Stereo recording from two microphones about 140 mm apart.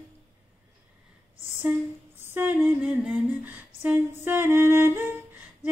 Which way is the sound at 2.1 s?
15° right (ahead or behind).